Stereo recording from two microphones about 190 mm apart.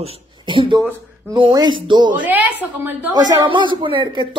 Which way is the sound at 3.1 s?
20° right (ahead or behind).